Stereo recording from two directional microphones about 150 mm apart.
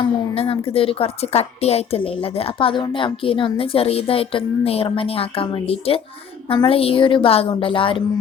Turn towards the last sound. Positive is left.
turn(degrees=35)  # may be behind; listen again after turning